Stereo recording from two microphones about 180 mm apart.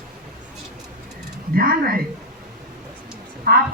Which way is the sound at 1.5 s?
55° right (ahead or behind).